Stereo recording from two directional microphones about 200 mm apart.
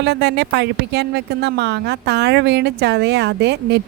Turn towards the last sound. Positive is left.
turn(degrees=-55)  # may be behind; listen again after turning